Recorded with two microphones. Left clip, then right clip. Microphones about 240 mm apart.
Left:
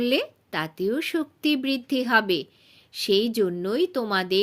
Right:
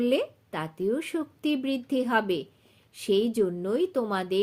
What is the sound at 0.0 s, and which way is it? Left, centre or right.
Speech, left.